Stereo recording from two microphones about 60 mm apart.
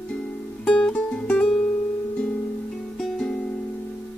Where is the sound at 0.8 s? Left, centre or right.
Centre.